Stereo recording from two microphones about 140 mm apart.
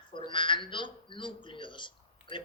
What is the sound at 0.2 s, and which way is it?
Speech, 35° left (ahead or behind).